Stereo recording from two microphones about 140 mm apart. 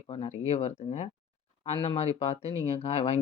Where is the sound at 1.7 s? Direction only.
40° left (ahead or behind).